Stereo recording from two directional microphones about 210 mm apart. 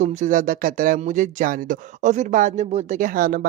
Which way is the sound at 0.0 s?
35° right (ahead or behind).